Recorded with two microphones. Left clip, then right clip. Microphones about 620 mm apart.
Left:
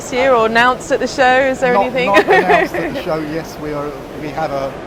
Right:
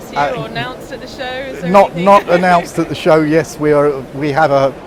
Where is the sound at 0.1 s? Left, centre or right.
Left.